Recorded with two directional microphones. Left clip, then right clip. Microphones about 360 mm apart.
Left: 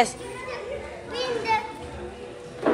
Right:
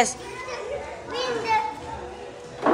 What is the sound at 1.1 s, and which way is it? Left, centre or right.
Children playing, right.